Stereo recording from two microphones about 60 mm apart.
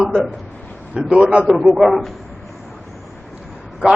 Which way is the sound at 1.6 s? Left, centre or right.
Centre.